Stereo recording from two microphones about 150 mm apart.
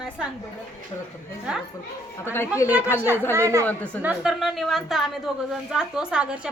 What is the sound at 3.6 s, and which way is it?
Speech, 10° left (ahead or behind).